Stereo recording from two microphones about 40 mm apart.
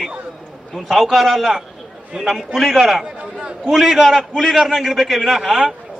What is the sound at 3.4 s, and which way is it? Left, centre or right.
Speech, centre.